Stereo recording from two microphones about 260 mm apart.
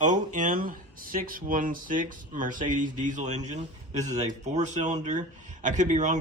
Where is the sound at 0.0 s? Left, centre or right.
Right.